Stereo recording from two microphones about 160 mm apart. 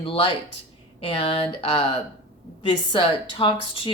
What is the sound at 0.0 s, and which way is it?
Speech, 35° left (ahead or behind).